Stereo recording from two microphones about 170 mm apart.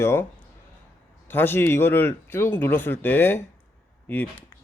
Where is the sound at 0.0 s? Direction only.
15° left (ahead or behind).